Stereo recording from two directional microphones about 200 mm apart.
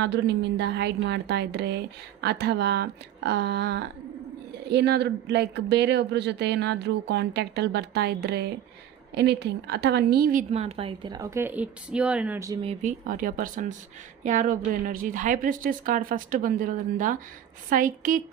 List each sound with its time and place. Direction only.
0.0 s speech: 60° right (ahead or behind)
10.5 s a woman's voice: 30° right (ahead or behind); by 12.5 s 10° right (ahead or behind)
12.6 s a woman's voice: 40° right (ahead or behind)